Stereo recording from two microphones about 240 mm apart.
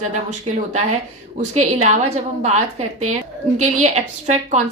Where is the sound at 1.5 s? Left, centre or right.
Right.